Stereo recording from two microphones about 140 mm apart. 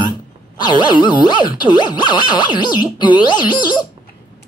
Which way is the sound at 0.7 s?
35° left (ahead or behind).